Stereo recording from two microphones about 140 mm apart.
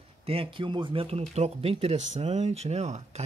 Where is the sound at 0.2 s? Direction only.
45° right (ahead or behind).